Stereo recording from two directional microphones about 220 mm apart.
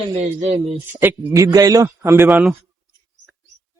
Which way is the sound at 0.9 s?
10° right (ahead or behind).